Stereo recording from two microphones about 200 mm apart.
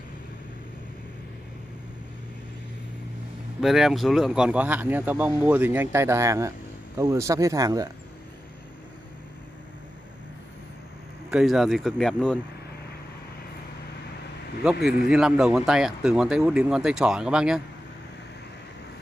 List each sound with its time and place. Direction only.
3.6 s speech: centre (ahead or behind); by 7.9 s 15° right (ahead or behind)
11.2 s speech: centre (ahead or behind)
14.8 s speech: 55° left (ahead or behind)
15.0 s speech: 5° right (ahead or behind)